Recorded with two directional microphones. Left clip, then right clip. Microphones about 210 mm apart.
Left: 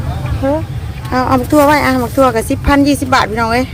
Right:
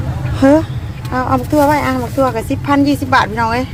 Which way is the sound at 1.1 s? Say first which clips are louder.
Left 3 dB; 15° left (ahead or behind).